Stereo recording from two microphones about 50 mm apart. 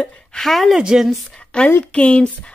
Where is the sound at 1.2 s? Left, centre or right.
Left.